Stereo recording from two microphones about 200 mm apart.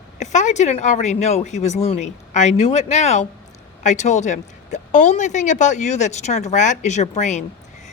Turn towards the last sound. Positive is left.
turn(degrees=35)  # may be behind; listen again after turning